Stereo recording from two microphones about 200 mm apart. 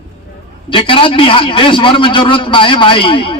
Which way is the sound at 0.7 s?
25° left (ahead or behind).